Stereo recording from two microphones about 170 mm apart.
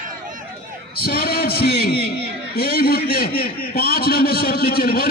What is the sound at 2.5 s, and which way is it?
A man's voice, 65° left (ahead or behind).